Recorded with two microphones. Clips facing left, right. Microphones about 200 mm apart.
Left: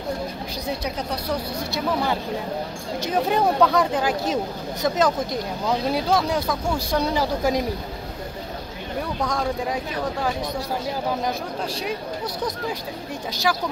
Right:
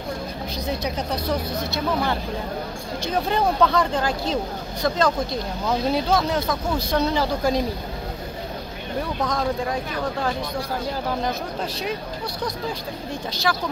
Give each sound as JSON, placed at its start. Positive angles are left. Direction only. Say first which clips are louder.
{"t": 3.3, "sound": "speech", "louder": "left 1 dB", "side_deg": 10}
{"t": 5.7, "sound": "speech", "louder": "right 1 dB", "side_deg": 5}
{"t": 13.5, "sound": "speech", "louder": "left 1 dB", "side_deg": 5}